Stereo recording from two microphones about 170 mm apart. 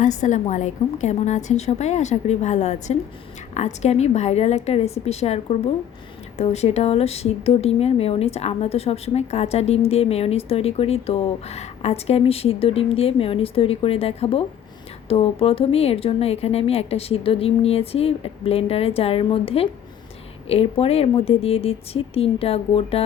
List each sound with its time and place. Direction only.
0.0 s a woman's voice: 45° left (ahead or behind)